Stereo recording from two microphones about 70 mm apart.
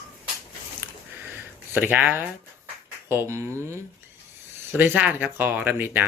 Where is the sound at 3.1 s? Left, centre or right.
Right.